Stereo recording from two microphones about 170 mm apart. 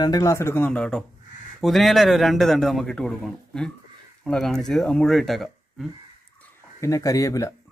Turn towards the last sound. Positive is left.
turn(degrees=20)  # may be behind; listen again after turning